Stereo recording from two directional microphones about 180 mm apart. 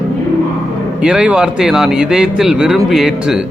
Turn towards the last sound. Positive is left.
turn(degrees=0)  # may be behind; listen again after turning